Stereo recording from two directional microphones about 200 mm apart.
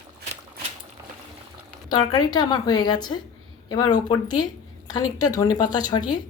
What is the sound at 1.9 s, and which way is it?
A woman's voice, 20° left (ahead or behind).